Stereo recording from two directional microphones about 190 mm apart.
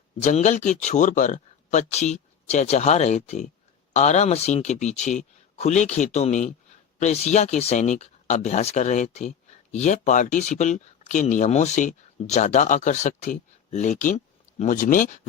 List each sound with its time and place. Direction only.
0.2 s speech: 35° left (ahead or behind)